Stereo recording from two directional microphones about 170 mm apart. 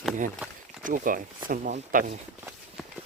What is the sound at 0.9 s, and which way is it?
Speech, 50° right (ahead or behind).